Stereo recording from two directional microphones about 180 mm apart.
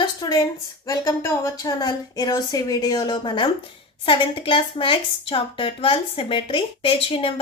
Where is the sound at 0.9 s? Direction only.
20° left (ahead or behind).